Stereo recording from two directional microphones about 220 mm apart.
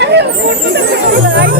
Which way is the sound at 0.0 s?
50° right (ahead or behind).